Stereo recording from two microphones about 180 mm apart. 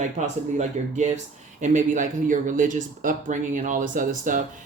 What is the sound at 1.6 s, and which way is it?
Speech, 45° right (ahead or behind).